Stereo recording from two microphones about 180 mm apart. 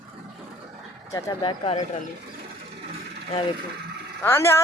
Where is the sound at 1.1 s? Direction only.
25° left (ahead or behind).